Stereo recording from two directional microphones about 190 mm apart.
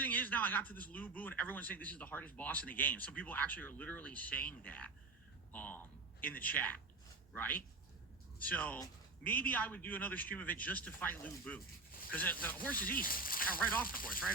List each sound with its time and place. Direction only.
0.0 s a man's voice: 10° left (ahead or behind)
12.9 s speech: 50° left (ahead or behind)